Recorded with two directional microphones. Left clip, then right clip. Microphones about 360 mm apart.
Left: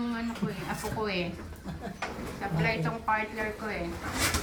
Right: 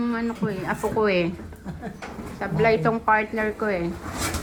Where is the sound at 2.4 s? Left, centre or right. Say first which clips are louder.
Right 10 dB; centre.